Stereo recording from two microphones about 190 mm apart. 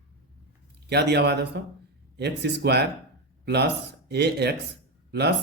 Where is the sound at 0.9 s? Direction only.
60° right (ahead or behind).